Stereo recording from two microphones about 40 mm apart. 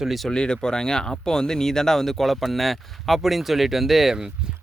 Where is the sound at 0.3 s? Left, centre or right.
Left; by 4.2 s centre.